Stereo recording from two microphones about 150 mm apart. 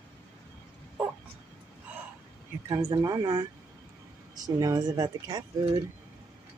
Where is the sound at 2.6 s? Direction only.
25° right (ahead or behind).